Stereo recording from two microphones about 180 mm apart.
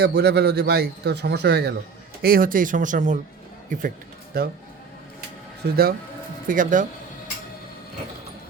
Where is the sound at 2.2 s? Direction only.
55° right (ahead or behind).